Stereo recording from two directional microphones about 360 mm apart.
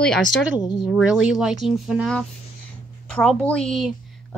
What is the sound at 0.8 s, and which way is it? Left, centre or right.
Speech, centre.